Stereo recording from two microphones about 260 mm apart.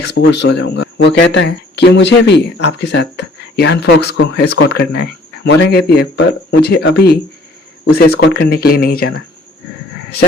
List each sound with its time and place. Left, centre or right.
0.1 s speech: left